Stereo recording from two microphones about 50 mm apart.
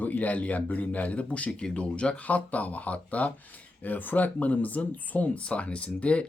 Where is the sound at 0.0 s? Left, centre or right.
Left.